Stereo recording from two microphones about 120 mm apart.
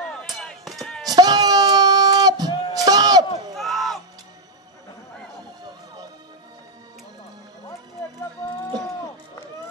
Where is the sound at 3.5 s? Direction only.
Centre (ahead or behind).